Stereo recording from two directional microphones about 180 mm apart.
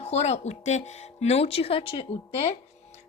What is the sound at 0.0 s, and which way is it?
A woman's voice, 35° left (ahead or behind).